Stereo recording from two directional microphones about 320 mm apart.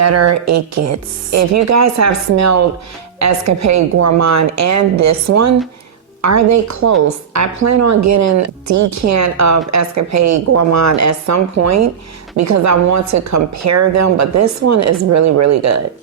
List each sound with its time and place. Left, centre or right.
0.0 s speech: right